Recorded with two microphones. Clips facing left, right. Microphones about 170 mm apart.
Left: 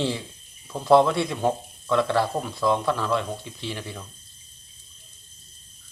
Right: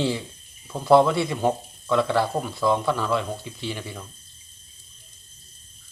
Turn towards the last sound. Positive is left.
turn(degrees=0)  # may be behind; listen again after turning